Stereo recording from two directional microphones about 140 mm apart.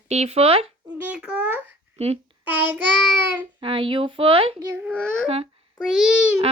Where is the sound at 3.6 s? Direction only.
40° right (ahead or behind).